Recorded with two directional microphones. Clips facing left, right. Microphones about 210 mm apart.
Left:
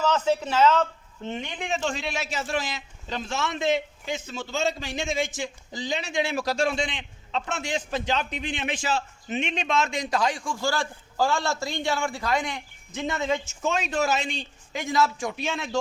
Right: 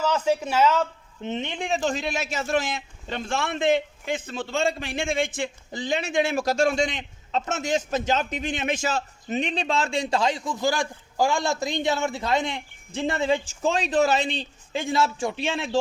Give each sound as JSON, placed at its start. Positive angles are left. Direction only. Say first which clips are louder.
{"t": 0.0, "sound": "a man's voice", "louder": "even", "side_deg": -10}
{"t": 1.3, "sound": "a man's voice", "louder": "right 3 dB", "side_deg": -25}